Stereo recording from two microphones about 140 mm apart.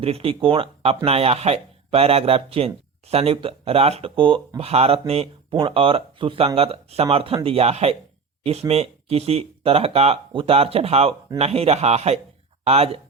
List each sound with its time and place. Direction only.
0.0 s speech: 40° right (ahead or behind)